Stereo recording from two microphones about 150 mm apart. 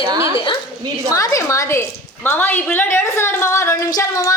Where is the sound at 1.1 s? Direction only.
20° left (ahead or behind).